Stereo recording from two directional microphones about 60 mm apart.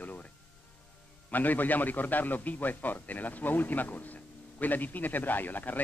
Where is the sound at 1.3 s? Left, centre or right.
Left.